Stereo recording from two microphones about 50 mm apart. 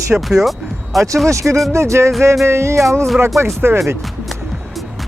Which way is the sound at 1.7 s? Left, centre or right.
Right.